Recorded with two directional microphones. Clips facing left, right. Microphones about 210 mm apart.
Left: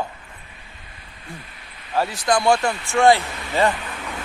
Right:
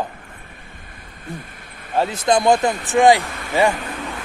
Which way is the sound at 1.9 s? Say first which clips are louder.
Right 3 dB; 20° right (ahead or behind).